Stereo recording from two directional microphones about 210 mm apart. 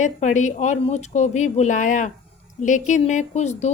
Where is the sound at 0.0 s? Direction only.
35° left (ahead or behind).